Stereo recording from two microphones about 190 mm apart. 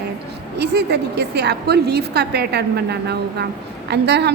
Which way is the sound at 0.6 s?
60° right (ahead or behind).